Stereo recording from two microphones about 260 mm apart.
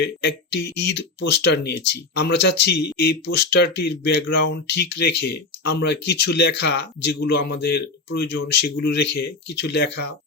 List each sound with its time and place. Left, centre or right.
0.0 s speech: left